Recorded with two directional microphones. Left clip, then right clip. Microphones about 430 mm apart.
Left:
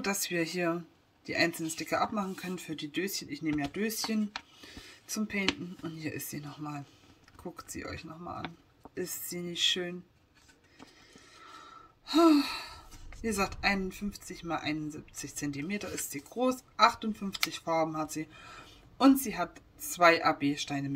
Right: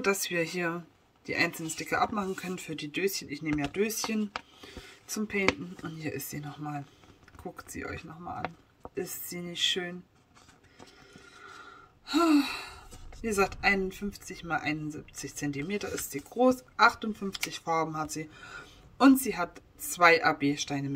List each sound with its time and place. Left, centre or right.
0.0 s speech: centre
11.1 s gasp: centre
13.2 s speech: centre